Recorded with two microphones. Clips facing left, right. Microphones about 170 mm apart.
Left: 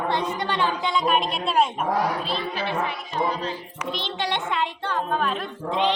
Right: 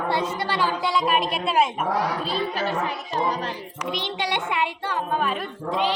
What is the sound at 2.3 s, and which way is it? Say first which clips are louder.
Speech: right 2 dB; 45° right (ahead or behind).